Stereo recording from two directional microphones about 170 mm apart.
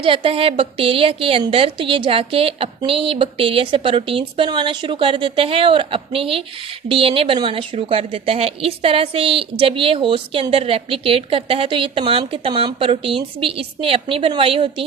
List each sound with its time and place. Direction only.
0.0 s a woman's voice: 30° right (ahead or behind)